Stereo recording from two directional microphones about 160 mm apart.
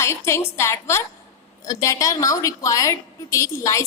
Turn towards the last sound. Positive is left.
turn(degrees=20)  # may be behind; listen again after turning